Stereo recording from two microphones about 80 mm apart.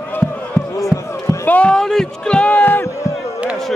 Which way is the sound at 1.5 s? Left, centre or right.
Centre.